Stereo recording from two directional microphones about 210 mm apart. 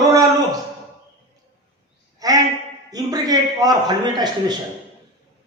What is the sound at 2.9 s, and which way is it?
A man's voice, 20° right (ahead or behind).